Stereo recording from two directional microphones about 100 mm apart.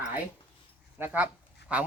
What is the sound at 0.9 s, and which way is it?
Speech, 20° right (ahead or behind).